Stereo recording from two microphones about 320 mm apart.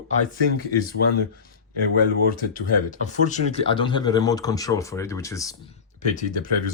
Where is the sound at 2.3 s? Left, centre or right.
Left; by 5.5 s centre.